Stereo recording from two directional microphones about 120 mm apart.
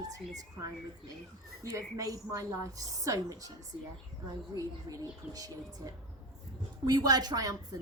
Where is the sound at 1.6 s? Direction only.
25° right (ahead or behind).